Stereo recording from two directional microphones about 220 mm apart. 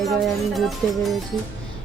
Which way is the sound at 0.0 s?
Centre (ahead or behind).